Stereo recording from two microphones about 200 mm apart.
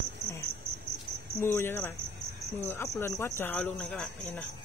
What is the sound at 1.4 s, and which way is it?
Speech, 10° left (ahead or behind).